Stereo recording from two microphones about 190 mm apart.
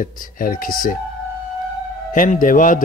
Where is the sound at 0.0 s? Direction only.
50° left (ahead or behind).